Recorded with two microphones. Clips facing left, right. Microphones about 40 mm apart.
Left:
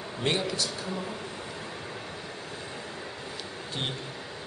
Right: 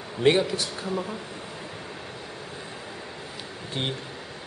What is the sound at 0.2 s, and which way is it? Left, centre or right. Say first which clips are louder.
Speech: right 7 dB; centre.